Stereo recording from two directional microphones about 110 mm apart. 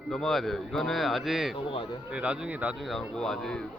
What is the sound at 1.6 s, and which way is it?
Speech, 50° left (ahead or behind).